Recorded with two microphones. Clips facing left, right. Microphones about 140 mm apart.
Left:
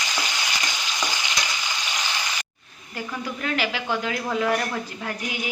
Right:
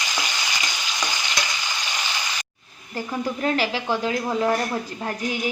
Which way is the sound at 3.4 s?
35° right (ahead or behind).